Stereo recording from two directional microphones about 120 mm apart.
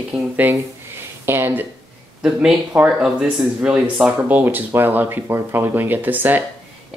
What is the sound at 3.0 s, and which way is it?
Speech, 5° right (ahead or behind).